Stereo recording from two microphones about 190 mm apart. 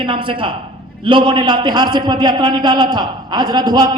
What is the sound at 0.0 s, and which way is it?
A man's voice, 25° right (ahead or behind).